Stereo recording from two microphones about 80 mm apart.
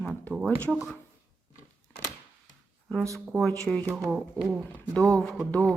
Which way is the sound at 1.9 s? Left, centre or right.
Left.